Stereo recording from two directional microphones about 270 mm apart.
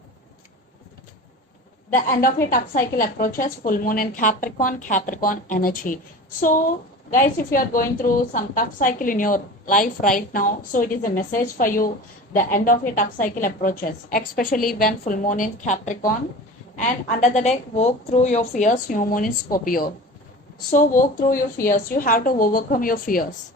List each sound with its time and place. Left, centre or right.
1.9 s a woman's voice: left